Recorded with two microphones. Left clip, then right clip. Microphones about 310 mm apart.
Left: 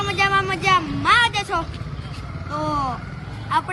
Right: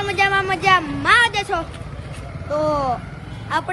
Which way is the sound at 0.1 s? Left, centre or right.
Centre.